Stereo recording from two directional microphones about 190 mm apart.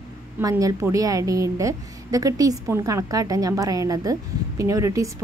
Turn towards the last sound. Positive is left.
turn(degrees=-15)  # may be behind; listen again after turning